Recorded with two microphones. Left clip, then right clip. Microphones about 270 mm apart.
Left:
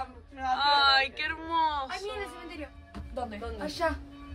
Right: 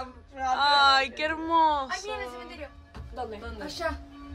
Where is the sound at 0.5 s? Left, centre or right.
Centre.